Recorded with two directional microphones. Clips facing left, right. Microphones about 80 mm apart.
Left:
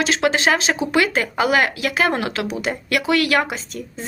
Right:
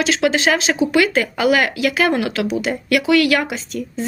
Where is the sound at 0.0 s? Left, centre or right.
Left.